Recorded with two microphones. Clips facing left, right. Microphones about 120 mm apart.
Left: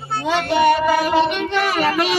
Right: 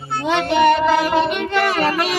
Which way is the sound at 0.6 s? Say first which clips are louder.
Right 1 dB; 10° left (ahead or behind).